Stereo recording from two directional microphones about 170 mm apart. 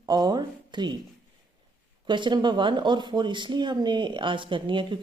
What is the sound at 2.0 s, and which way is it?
Speech, 25° right (ahead or behind).